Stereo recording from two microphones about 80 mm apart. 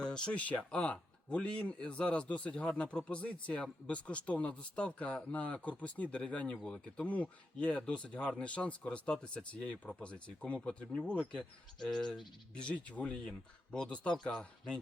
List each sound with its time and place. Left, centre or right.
0.0 s speech: centre